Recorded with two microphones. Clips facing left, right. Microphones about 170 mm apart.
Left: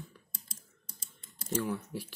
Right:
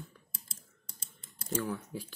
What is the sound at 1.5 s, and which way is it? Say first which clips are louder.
Speech: left 1 dB; 5° left (ahead or behind).